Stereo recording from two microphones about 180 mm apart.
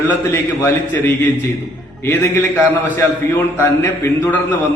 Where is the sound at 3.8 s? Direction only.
10° left (ahead or behind).